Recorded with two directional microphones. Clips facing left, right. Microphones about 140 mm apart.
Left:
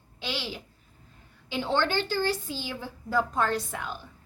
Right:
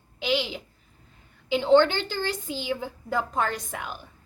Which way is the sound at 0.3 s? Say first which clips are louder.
Right 6 dB; 15° right (ahead or behind).